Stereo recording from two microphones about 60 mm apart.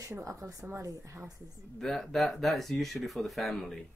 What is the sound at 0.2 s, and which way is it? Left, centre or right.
A woman's voice, right.